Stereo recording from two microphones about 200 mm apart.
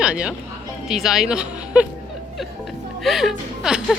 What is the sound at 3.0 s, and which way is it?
Speech, centre (ahead or behind).